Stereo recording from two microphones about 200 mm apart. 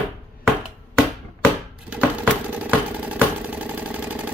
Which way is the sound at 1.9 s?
5° right (ahead or behind).